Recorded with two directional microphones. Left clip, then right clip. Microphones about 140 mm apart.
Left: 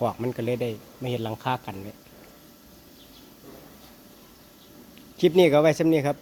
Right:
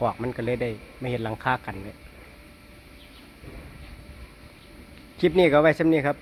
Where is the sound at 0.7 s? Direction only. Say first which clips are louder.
Even; 35° right (ahead or behind).